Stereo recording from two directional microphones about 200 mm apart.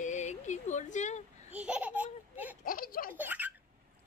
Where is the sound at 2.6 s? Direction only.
45° left (ahead or behind).